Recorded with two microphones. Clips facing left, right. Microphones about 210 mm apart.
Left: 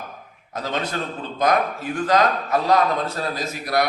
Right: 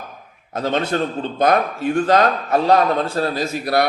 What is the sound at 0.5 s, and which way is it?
A man's voice, 25° right (ahead or behind).